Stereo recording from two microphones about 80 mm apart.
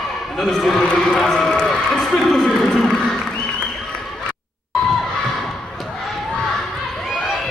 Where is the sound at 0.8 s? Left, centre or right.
Centre.